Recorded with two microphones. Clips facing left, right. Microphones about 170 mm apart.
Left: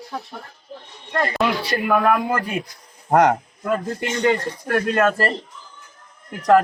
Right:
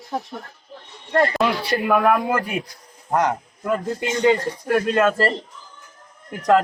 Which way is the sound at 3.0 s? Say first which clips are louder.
Left 5 dB; 60° left (ahead or behind).